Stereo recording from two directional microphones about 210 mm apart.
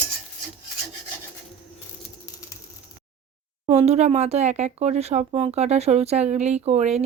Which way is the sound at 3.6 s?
30° right (ahead or behind).